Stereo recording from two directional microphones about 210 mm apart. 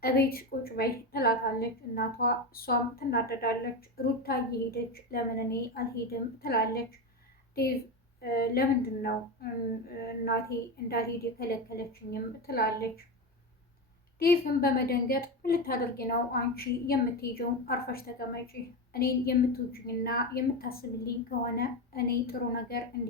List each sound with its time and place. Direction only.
0.0 s a woman's voice: 45° left (ahead or behind)
8.2 s a woman's voice: 45° left (ahead or behind)
10.8 s a woman's voice: 45° left (ahead or behind)
14.2 s a woman's voice: 45° left (ahead or behind)